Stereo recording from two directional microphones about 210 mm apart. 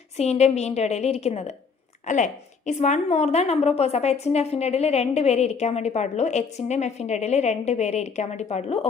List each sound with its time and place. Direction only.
0.2 s a woman's voice: 30° left (ahead or behind)